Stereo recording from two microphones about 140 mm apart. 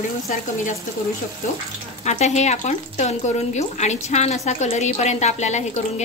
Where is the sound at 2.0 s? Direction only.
55° left (ahead or behind).